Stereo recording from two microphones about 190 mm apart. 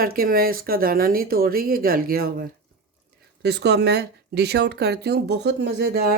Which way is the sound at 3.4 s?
60° right (ahead or behind).